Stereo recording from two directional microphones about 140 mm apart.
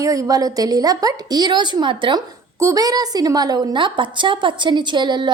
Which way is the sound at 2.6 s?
25° right (ahead or behind).